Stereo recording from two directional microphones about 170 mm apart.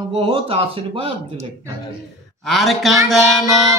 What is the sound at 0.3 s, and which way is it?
Speech, 35° right (ahead or behind).